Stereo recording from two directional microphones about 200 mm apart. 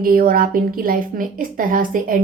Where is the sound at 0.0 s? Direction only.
45° right (ahead or behind).